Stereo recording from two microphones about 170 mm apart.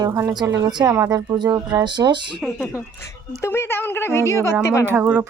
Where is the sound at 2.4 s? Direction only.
Centre (ahead or behind).